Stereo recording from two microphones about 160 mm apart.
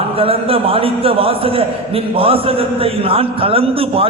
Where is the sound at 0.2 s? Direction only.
35° right (ahead or behind).